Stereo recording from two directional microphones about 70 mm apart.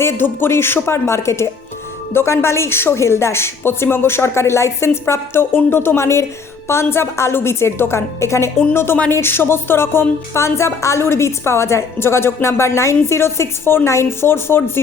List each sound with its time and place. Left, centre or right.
0.0 s a woman's voice: left